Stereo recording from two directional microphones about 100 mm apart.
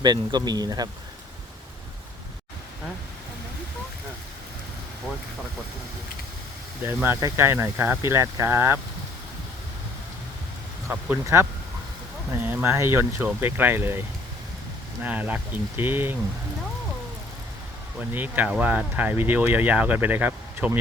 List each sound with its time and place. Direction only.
0.0 s speech: 45° right (ahead or behind)
6.8 s speech: 25° right (ahead or behind)
10.8 s speech: 25° right (ahead or behind)
15.0 s speech: 15° right (ahead or behind)
18.1 s speech: 20° right (ahead or behind)